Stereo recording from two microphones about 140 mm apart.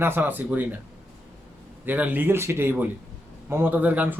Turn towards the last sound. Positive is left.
turn(degrees=-10)  # may be behind; listen again after turning